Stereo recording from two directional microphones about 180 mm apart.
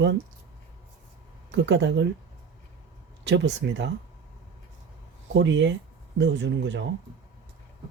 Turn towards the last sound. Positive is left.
turn(degrees=-90)